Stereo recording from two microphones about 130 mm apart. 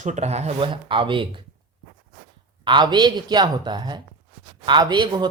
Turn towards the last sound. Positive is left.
turn(degrees=-35)  # may be behind; listen again after turning